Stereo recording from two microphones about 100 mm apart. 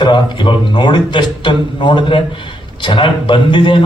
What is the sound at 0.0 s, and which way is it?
A man's voice, 50° left (ahead or behind).